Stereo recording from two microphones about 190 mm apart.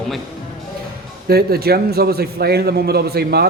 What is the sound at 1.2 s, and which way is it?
A man's voice, 55° right (ahead or behind).